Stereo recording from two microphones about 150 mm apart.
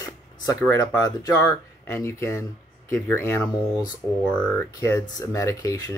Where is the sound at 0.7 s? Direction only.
25° left (ahead or behind); by 4.6 s 5° left (ahead or behind).